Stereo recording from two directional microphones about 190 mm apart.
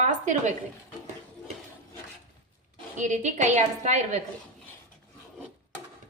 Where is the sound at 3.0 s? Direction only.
40° right (ahead or behind).